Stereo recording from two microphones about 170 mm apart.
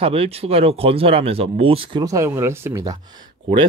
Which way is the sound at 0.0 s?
35° right (ahead or behind).